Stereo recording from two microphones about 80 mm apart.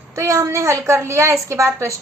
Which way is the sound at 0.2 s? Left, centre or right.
Right.